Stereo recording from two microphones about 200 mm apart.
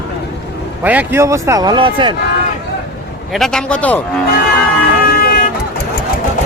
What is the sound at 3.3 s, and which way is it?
Speech, centre (ahead or behind).